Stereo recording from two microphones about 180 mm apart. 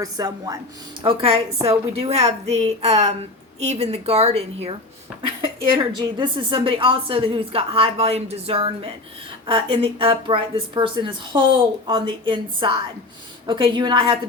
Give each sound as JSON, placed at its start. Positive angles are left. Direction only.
{"t": 0.0, "sound": "a woman's voice", "side_deg": -20}
{"t": 5.7, "sound": "a woman's voice", "side_deg": -25}